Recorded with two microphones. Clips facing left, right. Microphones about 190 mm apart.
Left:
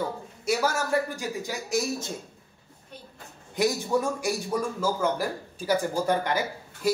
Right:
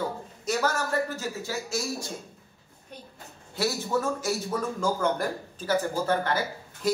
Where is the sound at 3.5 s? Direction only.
15° left (ahead or behind).